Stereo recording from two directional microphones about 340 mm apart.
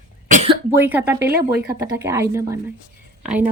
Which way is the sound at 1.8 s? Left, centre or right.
Centre.